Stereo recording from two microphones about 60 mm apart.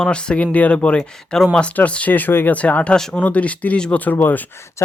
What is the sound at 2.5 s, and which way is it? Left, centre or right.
Speech, left.